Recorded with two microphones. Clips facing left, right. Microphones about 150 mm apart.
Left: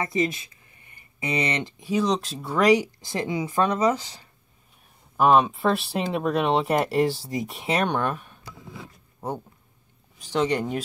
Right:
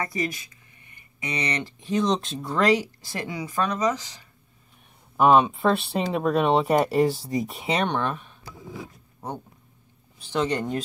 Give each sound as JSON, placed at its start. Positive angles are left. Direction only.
{"t": 0.0, "sound": "speech", "side_deg": 25}
{"t": 2.6, "sound": "speech", "side_deg": 15}
{"t": 5.1, "sound": "speech", "side_deg": 0}
{"t": 10.1, "sound": "speech", "side_deg": 15}